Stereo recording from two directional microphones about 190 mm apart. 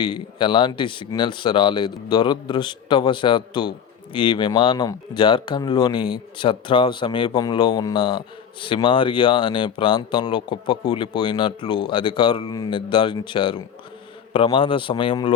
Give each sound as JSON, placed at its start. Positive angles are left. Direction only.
{"t": 0.0, "sound": "a man's voice", "side_deg": 25}